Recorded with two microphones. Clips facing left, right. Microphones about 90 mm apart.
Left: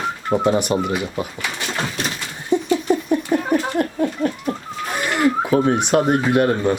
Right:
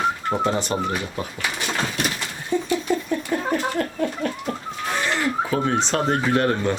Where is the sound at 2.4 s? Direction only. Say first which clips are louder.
Left 4 dB; 20° left (ahead or behind).